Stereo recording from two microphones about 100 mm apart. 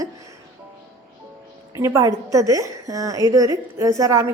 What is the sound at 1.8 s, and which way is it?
A woman's voice, 30° right (ahead or behind).